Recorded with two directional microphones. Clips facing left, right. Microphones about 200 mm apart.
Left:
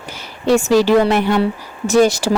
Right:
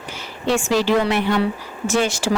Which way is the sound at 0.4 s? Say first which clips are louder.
Left 6 dB; 40° left (ahead or behind).